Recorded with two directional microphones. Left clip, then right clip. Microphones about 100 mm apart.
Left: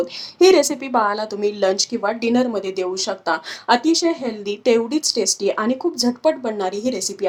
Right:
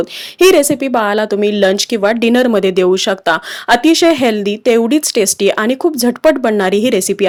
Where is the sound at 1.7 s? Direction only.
80° right.